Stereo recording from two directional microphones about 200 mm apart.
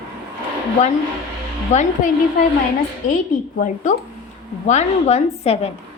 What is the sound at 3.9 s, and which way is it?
A woman's voice, 40° left (ahead or behind).